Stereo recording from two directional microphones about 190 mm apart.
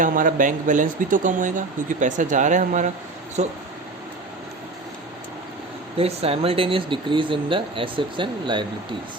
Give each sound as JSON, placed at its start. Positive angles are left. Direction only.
{"t": 0.0, "sound": "speech", "side_deg": -45}
{"t": 6.0, "sound": "speech", "side_deg": -30}